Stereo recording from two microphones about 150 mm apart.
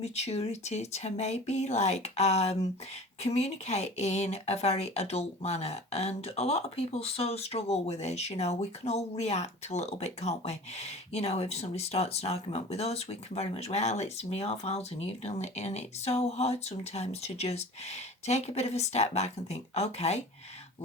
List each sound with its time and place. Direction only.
0.0 s speech: 45° left (ahead or behind)